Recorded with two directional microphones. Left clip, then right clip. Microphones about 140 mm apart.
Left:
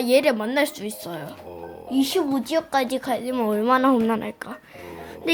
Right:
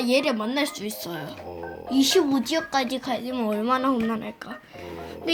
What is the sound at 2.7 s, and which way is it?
A child's voice, 25° left (ahead or behind).